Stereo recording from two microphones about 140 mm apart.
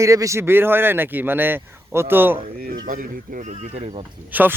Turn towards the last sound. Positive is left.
turn(degrees=-10)  # may be behind; listen again after turning